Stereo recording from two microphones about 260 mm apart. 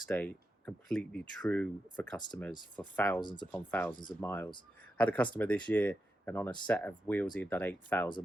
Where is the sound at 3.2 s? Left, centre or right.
Centre.